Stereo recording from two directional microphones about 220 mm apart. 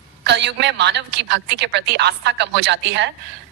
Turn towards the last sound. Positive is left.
turn(degrees=-50)  # may be behind; listen again after turning